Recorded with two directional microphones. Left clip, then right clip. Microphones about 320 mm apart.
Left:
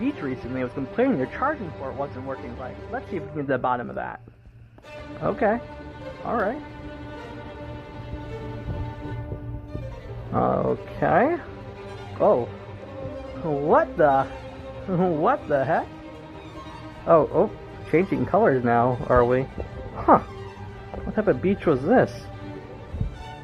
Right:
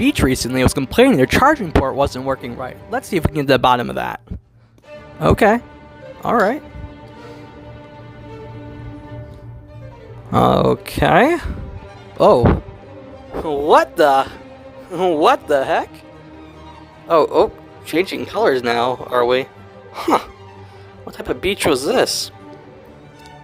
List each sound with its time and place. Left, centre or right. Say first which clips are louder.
0.0 s speech: right 12 dB; right
5.2 s speech: right 9 dB; right
10.3 s speech: right 9 dB; right
13.5 s speech: right 7 dB; right
17.1 s speech: right 5 dB; right
21.4 s speech: right 6 dB; right